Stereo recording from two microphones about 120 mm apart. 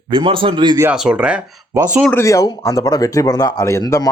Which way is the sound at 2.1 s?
25° left (ahead or behind).